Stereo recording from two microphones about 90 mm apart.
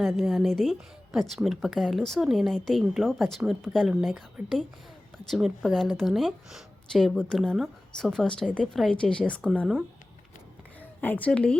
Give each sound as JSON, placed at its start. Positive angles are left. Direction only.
{"t": 0.0, "sound": "speech", "side_deg": 0}
{"t": 10.8, "sound": "a sound", "side_deg": 20}
{"t": 11.3, "sound": "speech", "side_deg": 15}